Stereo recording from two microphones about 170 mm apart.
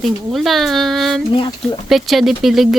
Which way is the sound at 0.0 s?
Centre (ahead or behind).